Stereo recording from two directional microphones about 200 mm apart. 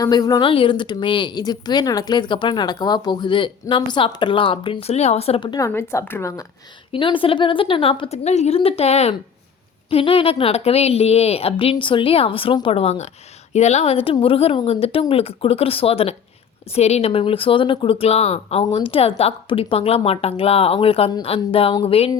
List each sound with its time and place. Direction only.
0.0 s speech: 20° left (ahead or behind)
6.9 s speech: 25° left (ahead or behind)